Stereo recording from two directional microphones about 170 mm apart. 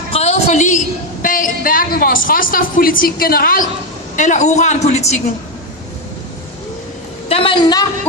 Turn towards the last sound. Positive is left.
turn(degrees=25)  # may be behind; listen again after turning